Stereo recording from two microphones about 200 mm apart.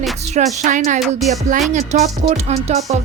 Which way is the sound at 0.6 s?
40° right (ahead or behind).